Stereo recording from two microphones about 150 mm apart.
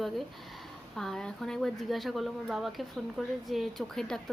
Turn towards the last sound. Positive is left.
turn(degrees=5)  # may be behind; listen again after turning